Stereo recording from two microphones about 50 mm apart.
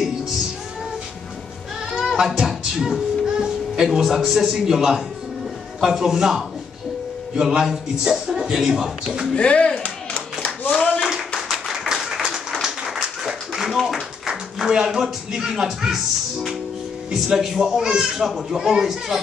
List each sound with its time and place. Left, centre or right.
2.1 s music: centre
3.3 s a man's voice: centre
9.3 s clapping: left
11.1 s clapping: centre
11.8 s applause: centre
12.6 s a sound: centre
14.2 s a sound: centre
14.9 s a man's voice: centre